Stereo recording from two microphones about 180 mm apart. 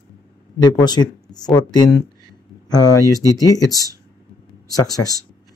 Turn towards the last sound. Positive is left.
turn(degrees=20)  # may be behind; listen again after turning